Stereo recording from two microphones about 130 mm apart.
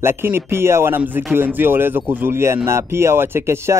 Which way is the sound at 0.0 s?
20° right (ahead or behind).